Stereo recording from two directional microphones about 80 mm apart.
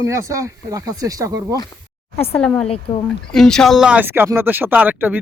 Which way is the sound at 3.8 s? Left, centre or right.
Centre.